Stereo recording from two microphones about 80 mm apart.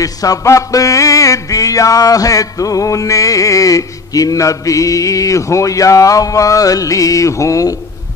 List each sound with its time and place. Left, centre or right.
0.0 s music: left